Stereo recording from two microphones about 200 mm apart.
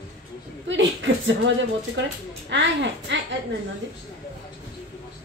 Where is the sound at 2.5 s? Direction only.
60° right (ahead or behind).